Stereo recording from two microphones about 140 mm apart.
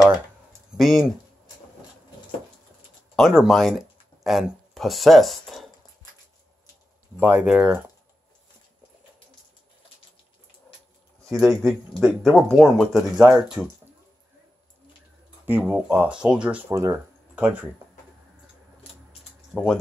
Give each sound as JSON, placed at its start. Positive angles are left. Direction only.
{"t": 0.5, "sound": "a sound", "side_deg": 0}
{"t": 3.2, "sound": "speech", "side_deg": 0}
{"t": 7.2, "sound": "speech", "side_deg": -10}
{"t": 11.2, "sound": "speech", "side_deg": 0}
{"t": 13.2, "sound": "speech", "side_deg": -10}
{"t": 15.4, "sound": "speech", "side_deg": -15}
{"t": 16.7, "sound": "speech", "side_deg": -20}
{"t": 19.5, "sound": "speech", "side_deg": 0}